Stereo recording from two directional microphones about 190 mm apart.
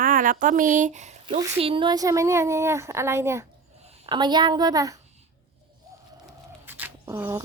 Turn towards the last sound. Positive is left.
turn(degrees=-10)  # may be behind; listen again after turning